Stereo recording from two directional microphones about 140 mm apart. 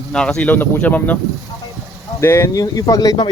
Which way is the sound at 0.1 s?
5° left (ahead or behind).